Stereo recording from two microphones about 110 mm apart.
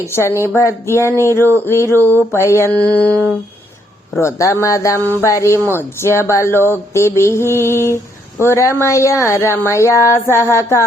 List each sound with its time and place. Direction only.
0.0 s speech: 25° left (ahead or behind)
1.1 s speech: 25° right (ahead or behind)
1.4 s speech: 20° left (ahead or behind)
2.6 s speech: 35° right (ahead or behind)
3.0 s humming: 15° left (ahead or behind)
4.2 s speech: 25° left (ahead or behind)